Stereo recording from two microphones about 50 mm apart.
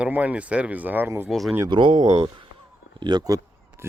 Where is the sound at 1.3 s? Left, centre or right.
Centre.